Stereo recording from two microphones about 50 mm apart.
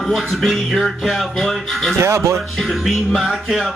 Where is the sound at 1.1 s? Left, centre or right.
Centre.